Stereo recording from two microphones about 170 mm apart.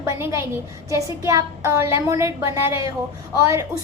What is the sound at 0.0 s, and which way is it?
A woman's voice, 15° right (ahead or behind).